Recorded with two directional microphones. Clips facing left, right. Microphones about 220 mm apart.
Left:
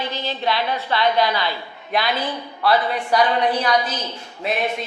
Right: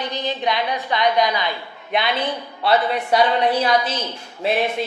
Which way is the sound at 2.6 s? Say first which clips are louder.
Right 1 dB; 25° right (ahead or behind).